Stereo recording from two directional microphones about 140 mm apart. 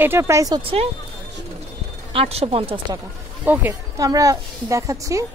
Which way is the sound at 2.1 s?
45° right (ahead or behind).